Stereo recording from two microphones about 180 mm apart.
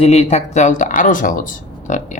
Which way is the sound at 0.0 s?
35° left (ahead or behind).